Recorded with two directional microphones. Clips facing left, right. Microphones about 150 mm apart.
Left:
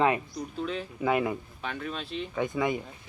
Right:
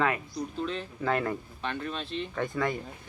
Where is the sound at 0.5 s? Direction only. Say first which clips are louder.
Left 3 dB; 5° left (ahead or behind).